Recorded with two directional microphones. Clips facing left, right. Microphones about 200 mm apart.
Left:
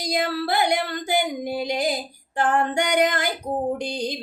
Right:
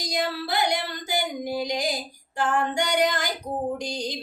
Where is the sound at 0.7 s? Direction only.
60° left (ahead or behind).